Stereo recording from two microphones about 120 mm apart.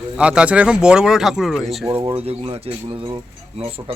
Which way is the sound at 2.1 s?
50° right (ahead or behind).